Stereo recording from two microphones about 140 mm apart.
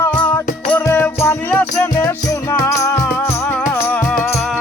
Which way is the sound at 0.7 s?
10° left (ahead or behind).